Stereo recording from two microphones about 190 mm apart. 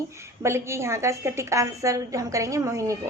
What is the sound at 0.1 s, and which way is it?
A woman's voice, 15° right (ahead or behind).